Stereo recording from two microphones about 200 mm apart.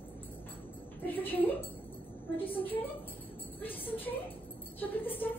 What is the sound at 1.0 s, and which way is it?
Speech, 10° left (ahead or behind).